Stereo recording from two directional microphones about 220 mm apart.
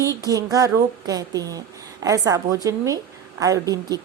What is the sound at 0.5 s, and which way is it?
A woman's voice, 15° right (ahead or behind).